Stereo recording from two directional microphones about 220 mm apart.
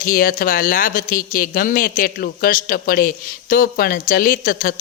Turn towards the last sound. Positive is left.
turn(degrees=40)  # may be behind; listen again after turning